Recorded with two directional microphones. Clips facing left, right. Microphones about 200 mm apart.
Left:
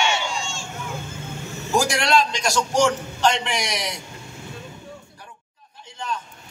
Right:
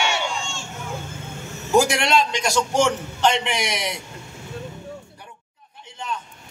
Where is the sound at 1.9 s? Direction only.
20° right (ahead or behind).